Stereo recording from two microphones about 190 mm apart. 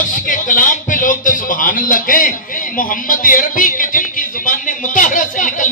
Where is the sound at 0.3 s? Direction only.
45° left (ahead or behind).